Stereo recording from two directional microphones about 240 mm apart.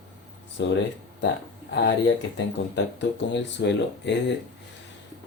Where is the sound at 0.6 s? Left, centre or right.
Left.